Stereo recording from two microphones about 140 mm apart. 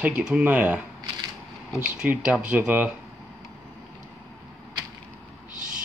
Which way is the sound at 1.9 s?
10° right (ahead or behind).